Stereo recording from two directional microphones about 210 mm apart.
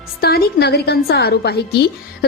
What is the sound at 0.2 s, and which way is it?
A woman's voice, 45° left (ahead or behind).